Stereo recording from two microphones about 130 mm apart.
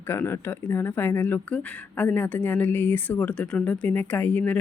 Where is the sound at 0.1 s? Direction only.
20° left (ahead or behind).